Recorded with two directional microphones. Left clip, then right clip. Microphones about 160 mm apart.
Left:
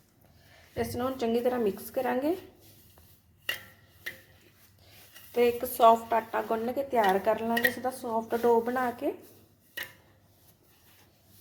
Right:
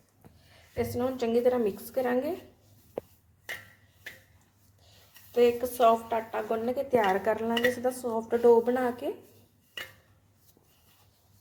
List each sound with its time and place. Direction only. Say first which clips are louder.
0.5 s a woman's voice: right 2 dB; centre (ahead or behind)
5.3 s a woman's voice: right 2 dB; 15° left (ahead or behind); by 9.1 s 5° right (ahead or behind)